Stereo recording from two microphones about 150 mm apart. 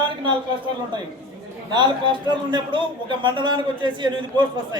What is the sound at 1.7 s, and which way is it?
A man's voice, 30° right (ahead or behind).